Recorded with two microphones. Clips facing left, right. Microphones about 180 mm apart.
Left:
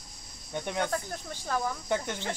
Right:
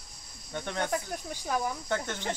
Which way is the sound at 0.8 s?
15° right (ahead or behind).